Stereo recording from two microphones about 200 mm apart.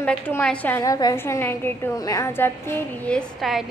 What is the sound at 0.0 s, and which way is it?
A woman's voice, 5° left (ahead or behind).